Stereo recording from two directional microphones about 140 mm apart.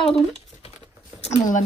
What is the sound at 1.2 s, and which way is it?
Speech, 55° left (ahead or behind).